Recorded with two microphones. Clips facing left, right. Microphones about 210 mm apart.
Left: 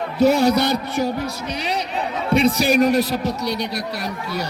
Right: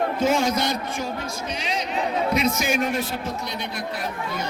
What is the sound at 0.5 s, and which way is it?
Speech, 65° left (ahead or behind).